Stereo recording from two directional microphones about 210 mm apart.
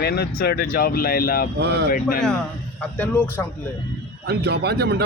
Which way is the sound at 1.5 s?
55° right (ahead or behind).